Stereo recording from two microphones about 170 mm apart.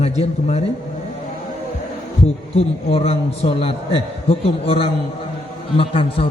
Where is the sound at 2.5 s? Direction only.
35° left (ahead or behind).